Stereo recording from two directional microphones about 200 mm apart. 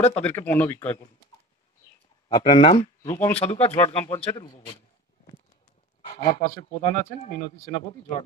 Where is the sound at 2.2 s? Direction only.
25° left (ahead or behind).